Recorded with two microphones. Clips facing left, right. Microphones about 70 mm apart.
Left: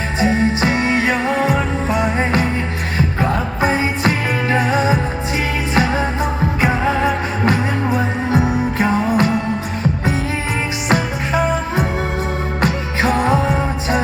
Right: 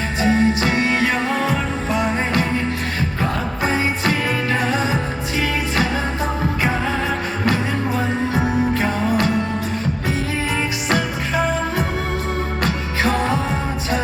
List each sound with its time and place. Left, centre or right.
0.2 s music: left
6.6 s music: left
8.8 s music: left
12.6 s music: left